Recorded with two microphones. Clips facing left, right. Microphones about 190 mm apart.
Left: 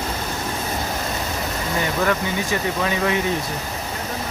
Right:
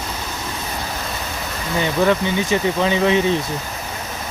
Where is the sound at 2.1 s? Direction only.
25° right (ahead or behind).